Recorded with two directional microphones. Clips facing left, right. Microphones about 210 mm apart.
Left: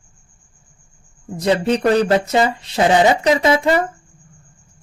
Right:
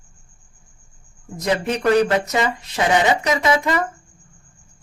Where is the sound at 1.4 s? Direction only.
30° left (ahead or behind).